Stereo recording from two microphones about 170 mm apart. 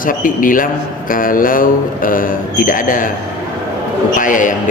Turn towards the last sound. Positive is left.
turn(degrees=50)  # may be behind; listen again after turning